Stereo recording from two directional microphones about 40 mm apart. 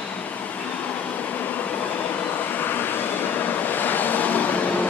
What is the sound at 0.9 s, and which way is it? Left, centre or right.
Vehicle, left.